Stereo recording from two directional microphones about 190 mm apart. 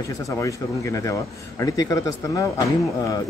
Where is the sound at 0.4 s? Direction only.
15° left (ahead or behind).